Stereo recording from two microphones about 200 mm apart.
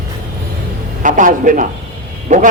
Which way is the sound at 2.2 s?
35° right (ahead or behind).